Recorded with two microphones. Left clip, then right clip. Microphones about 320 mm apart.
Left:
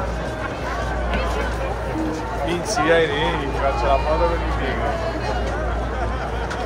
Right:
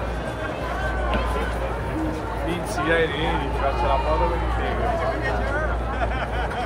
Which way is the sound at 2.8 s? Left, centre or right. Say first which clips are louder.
Left 4 dB; left.